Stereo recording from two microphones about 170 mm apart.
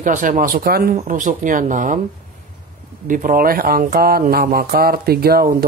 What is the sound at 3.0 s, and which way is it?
Speech, 50° right (ahead or behind).